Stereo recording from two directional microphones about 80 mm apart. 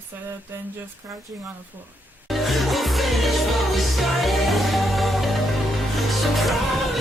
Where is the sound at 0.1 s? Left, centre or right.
Right.